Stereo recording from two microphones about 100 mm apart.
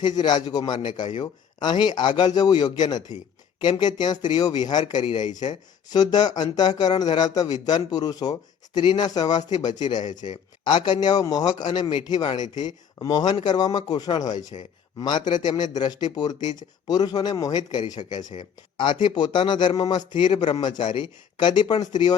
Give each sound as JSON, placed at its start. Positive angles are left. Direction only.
{"t": 0.0, "sound": "speech", "side_deg": 45}